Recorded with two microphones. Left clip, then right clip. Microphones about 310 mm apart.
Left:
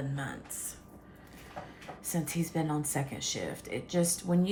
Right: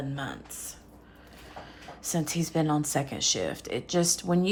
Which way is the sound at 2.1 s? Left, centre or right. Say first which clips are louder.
Right 5 dB; centre.